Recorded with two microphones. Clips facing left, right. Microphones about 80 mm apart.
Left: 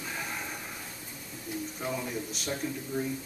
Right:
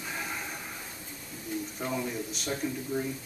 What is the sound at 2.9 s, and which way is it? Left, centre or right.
Speech, centre.